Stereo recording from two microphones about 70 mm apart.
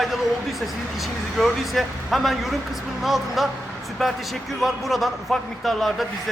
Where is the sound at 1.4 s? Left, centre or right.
Centre.